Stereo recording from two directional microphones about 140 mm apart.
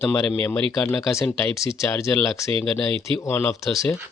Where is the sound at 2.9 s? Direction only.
35° right (ahead or behind).